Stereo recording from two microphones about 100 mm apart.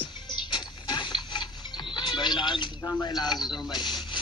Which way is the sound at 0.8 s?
45° left (ahead or behind).